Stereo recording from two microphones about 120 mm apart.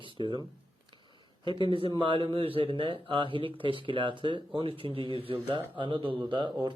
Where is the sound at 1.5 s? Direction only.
45° right (ahead or behind).